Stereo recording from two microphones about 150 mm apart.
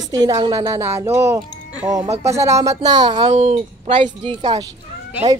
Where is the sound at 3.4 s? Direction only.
50° right (ahead or behind); by 4.7 s 30° right (ahead or behind).